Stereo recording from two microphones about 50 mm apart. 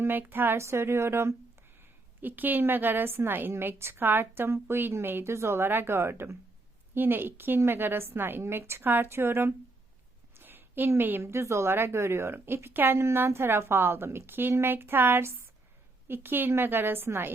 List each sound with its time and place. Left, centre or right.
0.0 s a woman's voice: right
0.6 s a woman's voice: right
1.8 s a woman's voice: right
6.9 s a woman's voice: right
8.8 s a woman's voice: right
9.0 s a woman's voice: right
10.3 s a sound: right
11.2 s a woman's voice: right